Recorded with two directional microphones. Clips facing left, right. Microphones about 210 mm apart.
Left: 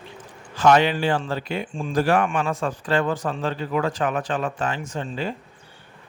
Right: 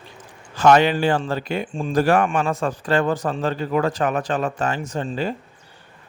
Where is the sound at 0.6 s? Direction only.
45° right (ahead or behind).